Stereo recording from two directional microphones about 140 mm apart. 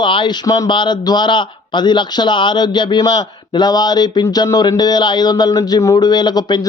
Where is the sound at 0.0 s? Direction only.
35° left (ahead or behind).